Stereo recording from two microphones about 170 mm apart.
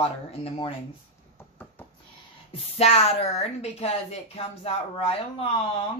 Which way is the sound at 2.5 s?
35° left (ahead or behind).